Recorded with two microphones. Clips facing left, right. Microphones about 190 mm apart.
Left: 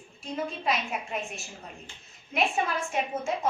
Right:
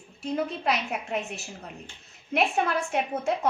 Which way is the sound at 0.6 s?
65° right (ahead or behind).